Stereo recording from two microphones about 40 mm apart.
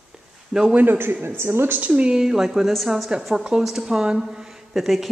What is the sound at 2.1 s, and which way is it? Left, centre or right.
Speech, centre.